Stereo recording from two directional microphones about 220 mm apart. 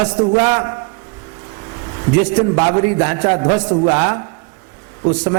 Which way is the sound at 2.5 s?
20° right (ahead or behind).